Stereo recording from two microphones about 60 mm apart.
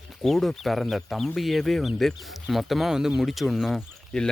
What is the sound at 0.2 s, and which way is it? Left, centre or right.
Speech, centre.